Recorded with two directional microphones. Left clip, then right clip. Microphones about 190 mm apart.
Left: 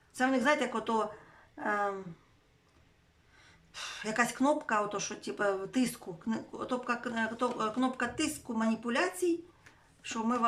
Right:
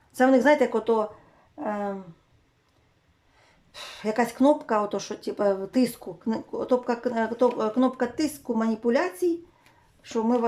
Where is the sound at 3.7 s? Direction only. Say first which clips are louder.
Right 5 dB; 25° right (ahead or behind).